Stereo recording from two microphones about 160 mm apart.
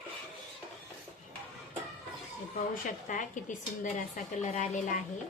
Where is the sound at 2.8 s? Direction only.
50° left (ahead or behind).